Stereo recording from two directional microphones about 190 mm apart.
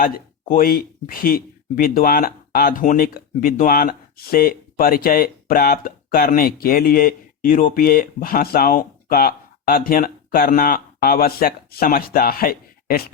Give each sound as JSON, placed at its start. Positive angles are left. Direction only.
{"t": 0.0, "sound": "speech", "side_deg": 45}